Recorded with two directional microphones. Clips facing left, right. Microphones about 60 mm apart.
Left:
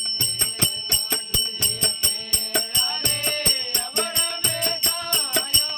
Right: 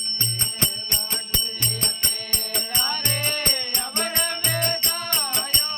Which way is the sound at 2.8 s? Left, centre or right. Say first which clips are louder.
Right 2 dB; right.